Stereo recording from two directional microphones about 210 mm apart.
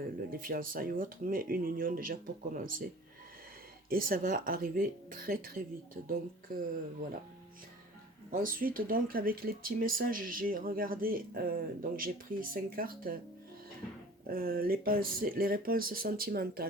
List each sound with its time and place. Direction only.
0.3 s speech: 45° right (ahead or behind)
3.8 s speech: 45° right (ahead or behind)
8.3 s speech: 40° right (ahead or behind)
14.3 s speech: 45° right (ahead or behind)